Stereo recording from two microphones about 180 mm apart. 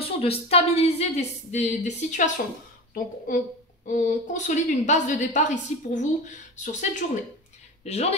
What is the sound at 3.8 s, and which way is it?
A woman's voice, 40° left (ahead or behind).